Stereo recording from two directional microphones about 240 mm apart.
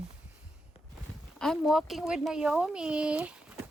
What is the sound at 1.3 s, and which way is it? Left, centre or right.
Speech, centre.